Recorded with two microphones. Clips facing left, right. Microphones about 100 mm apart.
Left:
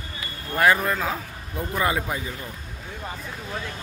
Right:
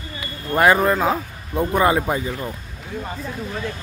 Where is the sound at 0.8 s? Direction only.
40° right (ahead or behind).